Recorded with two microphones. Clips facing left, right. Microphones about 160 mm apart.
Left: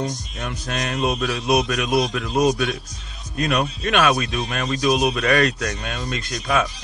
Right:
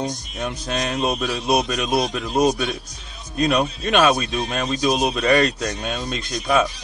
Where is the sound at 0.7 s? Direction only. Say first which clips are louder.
Even; 30° right (ahead or behind).